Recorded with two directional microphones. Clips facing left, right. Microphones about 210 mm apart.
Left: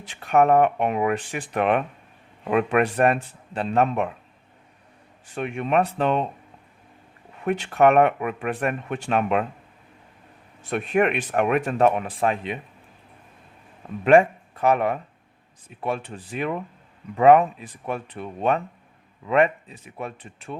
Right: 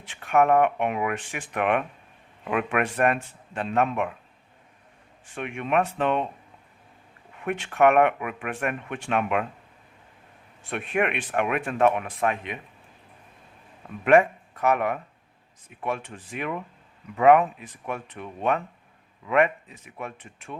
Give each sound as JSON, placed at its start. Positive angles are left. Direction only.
{"t": 0.0, "sound": "speech", "side_deg": 40}
{"t": 5.2, "sound": "speech", "side_deg": 35}
{"t": 7.4, "sound": "speech", "side_deg": 35}
{"t": 10.6, "sound": "speech", "side_deg": 40}
{"t": 14.0, "sound": "speech", "side_deg": 30}